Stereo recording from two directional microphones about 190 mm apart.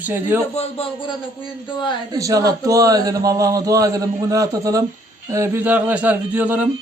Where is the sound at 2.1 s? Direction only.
15° right (ahead or behind).